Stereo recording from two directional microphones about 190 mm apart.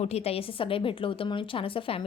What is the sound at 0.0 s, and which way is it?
A woman's voice, 35° left (ahead or behind).